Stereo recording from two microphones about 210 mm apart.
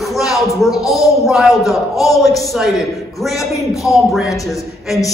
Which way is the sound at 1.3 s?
Centre (ahead or behind).